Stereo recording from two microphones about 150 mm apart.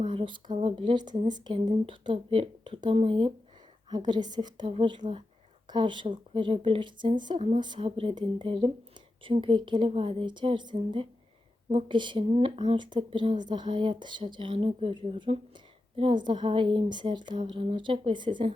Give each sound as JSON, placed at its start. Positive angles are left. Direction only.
{"t": 0.0, "sound": "a woman's voice", "side_deg": -35}